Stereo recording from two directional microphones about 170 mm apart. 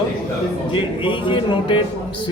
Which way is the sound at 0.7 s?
30° left (ahead or behind).